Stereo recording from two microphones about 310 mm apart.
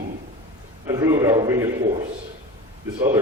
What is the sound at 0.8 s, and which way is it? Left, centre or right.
A man's voice, centre.